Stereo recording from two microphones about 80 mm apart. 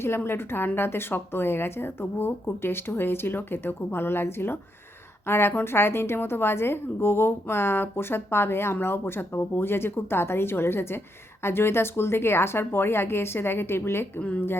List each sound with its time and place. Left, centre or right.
0.0 s a woman's voice: left
14.2 s a woman's voice: centre